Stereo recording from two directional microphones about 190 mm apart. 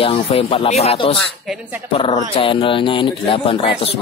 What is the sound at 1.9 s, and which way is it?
Speech, 25° left (ahead or behind).